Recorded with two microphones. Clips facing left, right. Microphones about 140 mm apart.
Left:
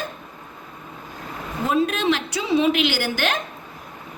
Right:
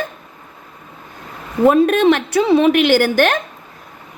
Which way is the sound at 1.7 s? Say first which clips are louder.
Right 9 dB; 55° right (ahead or behind).